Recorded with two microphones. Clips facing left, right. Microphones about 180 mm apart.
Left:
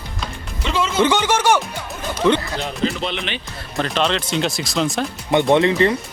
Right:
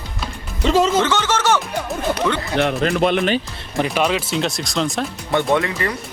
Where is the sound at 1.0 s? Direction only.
15° left (ahead or behind).